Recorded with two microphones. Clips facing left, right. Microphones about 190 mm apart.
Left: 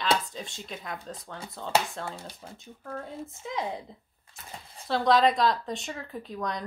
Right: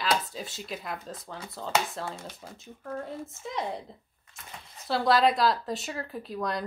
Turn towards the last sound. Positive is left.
turn(degrees=0)  # may be behind; listen again after turning